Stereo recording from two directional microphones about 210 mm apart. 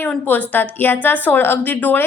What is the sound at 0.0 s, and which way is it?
A woman's voice, 5° left (ahead or behind).